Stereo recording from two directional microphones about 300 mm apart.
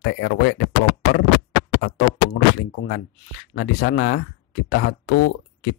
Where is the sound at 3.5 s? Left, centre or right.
Left.